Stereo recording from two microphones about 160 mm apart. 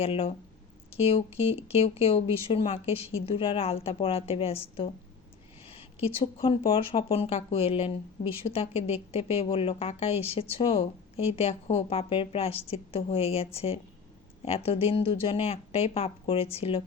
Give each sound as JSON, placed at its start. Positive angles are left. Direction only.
{"t": 0.0, "sound": "speech", "side_deg": 40}